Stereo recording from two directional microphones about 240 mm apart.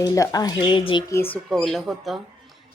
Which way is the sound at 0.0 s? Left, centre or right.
Centre.